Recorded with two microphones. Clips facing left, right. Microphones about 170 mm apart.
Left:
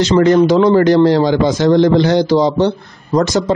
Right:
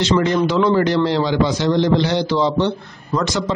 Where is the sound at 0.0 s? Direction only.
45° left (ahead or behind).